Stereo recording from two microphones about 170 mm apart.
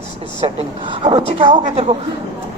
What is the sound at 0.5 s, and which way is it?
A man's voice, 30° right (ahead or behind).